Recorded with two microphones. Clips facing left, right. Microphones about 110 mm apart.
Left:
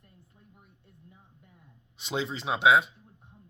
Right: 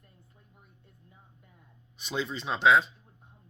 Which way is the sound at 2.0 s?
25° left (ahead or behind).